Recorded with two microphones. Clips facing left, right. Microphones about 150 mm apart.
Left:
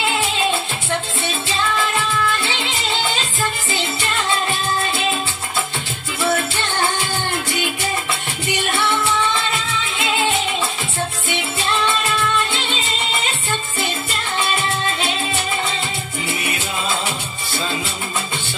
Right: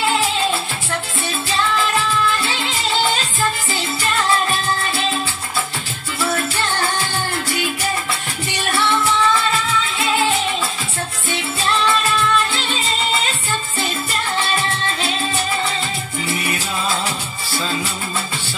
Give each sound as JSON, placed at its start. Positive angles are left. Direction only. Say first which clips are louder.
{"t": 0.1, "sound": "music", "louder": "right 1 dB", "side_deg": 20}
{"t": 6.2, "sound": "music", "louder": "left 1 dB", "side_deg": 25}
{"t": 8.5, "sound": "music", "louder": "even", "side_deg": 20}